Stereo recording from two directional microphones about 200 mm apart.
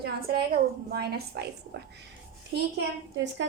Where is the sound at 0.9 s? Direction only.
55° right (ahead or behind).